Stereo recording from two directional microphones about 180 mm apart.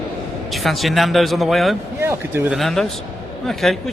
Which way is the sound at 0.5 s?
Centre (ahead or behind).